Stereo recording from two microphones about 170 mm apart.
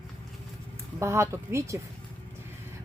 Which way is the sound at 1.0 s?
15° right (ahead or behind).